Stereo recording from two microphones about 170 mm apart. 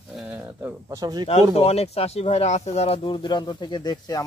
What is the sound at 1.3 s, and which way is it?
Speech, 35° left (ahead or behind).